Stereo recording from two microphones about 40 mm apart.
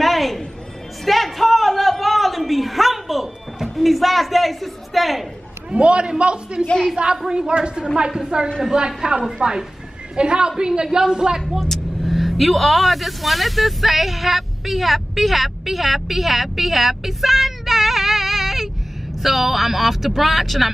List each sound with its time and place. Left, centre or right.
0.0 s music: centre
1.0 s a sound: centre
3.7 s a man's voice: centre
5.7 s a man's voice: right
11.6 s a man's voice: centre